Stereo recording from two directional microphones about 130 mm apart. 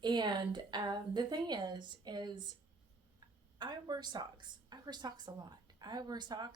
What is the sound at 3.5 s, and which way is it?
A woman's voice, 35° right (ahead or behind).